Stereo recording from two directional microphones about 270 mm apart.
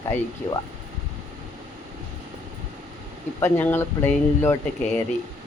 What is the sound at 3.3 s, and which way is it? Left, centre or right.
Speech, centre.